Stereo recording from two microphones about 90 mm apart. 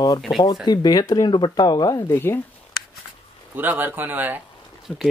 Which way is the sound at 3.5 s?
20° right (ahead or behind).